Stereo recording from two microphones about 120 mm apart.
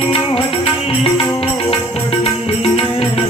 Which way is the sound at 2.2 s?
55° left (ahead or behind).